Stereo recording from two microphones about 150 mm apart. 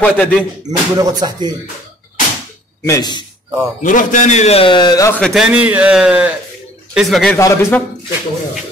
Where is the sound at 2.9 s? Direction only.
30° left (ahead or behind).